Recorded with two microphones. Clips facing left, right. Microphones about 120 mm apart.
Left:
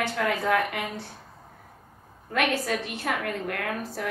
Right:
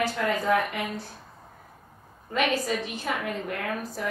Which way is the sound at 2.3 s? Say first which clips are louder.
Even; 70° left (ahead or behind).